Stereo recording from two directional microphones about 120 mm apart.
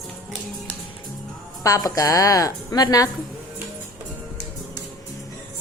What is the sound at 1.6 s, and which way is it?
A woman's voice, 30° left (ahead or behind).